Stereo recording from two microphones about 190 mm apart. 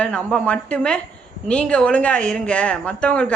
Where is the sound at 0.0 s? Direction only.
5° left (ahead or behind).